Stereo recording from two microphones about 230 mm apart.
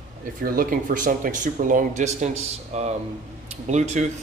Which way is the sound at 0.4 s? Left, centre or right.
Right.